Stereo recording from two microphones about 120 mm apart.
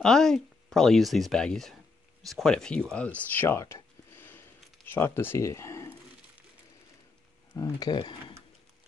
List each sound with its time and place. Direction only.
0.0 s speech: 5° left (ahead or behind); by 5.9 s 20° left (ahead or behind)
7.5 s speech: 30° left (ahead or behind)